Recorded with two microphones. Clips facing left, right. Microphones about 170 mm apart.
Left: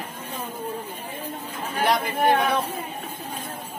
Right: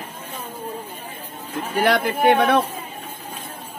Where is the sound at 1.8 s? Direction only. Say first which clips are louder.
Right 4 dB; 65° right (ahead or behind).